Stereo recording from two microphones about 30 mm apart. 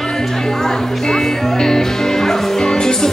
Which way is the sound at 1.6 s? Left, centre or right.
Centre.